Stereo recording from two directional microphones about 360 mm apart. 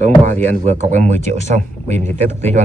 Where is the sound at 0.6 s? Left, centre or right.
Centre.